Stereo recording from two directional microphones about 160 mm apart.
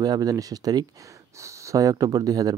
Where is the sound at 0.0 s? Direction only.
25° right (ahead or behind).